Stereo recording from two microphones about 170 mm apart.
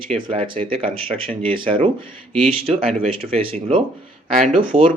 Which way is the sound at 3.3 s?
35° right (ahead or behind).